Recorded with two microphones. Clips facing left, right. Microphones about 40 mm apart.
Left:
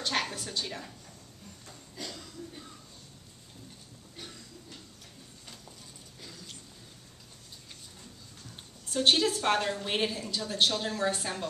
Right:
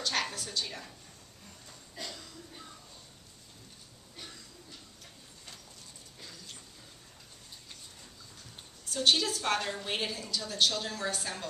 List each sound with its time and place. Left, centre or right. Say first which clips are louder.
0.0 s a sound: left 1 dB; left
8.9 s a woman's voice: left 2 dB; left; by 9.9 s centre
9.9 s a woman's voice: left 4 dB; left